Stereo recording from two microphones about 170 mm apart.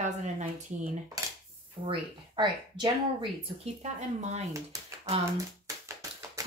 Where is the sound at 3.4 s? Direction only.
40° right (ahead or behind).